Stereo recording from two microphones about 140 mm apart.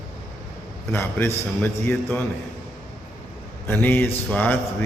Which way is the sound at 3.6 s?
15° left (ahead or behind).